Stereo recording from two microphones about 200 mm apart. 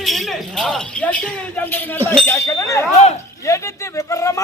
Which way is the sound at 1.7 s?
10° left (ahead or behind).